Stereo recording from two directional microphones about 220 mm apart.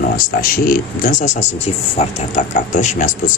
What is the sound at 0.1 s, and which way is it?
Speech, 40° left (ahead or behind).